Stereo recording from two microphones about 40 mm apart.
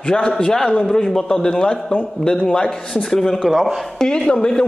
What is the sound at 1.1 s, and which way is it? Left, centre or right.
A man's voice, centre.